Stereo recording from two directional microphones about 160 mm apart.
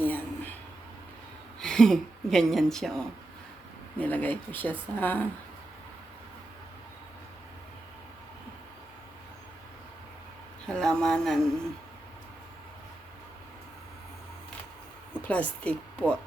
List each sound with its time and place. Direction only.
0.0 s a sound: 10° left (ahead or behind)
1.6 s speech: 5° left (ahead or behind)
10.7 s speech: 5° left (ahead or behind)
15.2 s speech: 10° left (ahead or behind)